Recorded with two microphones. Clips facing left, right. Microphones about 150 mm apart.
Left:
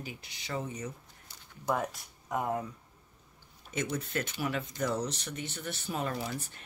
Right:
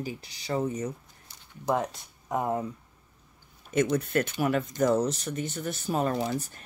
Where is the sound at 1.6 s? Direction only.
25° right (ahead or behind).